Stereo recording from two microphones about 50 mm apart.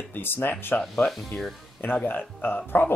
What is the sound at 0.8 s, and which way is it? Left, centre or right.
Speech, centre.